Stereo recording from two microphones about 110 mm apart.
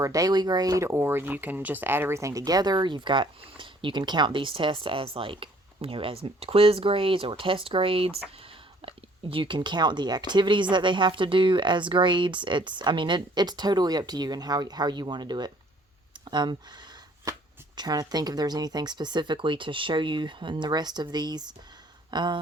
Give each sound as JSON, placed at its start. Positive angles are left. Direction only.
{"t": 0.0, "sound": "speech", "side_deg": -30}
{"t": 17.3, "sound": "shuffling cards", "side_deg": -30}
{"t": 17.7, "sound": "speech", "side_deg": -35}